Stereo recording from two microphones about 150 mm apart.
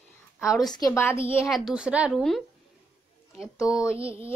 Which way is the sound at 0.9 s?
15° left (ahead or behind).